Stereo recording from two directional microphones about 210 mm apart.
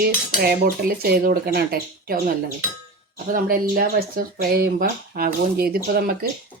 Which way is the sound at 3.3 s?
45° right (ahead or behind).